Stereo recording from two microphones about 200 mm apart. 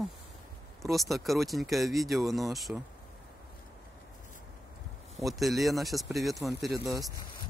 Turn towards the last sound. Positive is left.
turn(degrees=-20)  # may be behind; listen again after turning